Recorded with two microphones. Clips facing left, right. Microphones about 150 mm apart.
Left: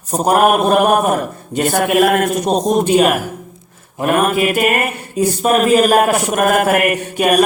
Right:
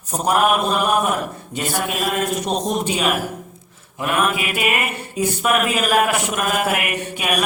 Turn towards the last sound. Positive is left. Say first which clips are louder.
# left 9 dB
turn(degrees=45)  # may be behind; listen again after turning